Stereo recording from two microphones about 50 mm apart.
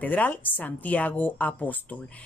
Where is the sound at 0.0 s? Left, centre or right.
Left.